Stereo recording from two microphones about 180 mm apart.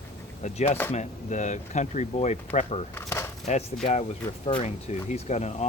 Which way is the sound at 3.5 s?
40° left (ahead or behind).